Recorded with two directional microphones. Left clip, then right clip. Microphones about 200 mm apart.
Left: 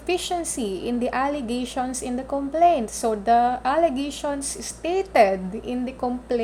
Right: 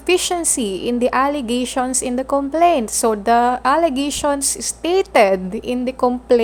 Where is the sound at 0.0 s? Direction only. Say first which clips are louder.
Right 7 dB; 25° right (ahead or behind).